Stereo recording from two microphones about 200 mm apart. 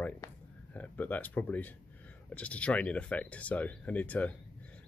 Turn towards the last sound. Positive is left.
turn(degrees=5)  # may be behind; listen again after turning